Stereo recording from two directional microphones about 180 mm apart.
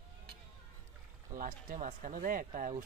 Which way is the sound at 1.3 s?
50° right (ahead or behind).